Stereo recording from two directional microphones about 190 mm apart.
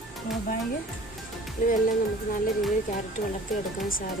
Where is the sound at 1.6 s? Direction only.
45° left (ahead or behind).